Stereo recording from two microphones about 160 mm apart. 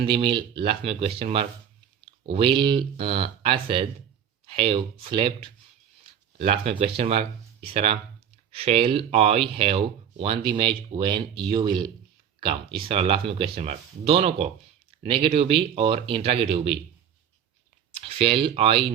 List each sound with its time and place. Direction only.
0.0 s speech: 35° right (ahead or behind)
18.0 s speech: 35° right (ahead or behind)